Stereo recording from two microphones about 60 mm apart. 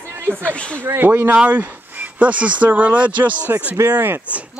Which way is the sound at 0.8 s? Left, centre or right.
Right.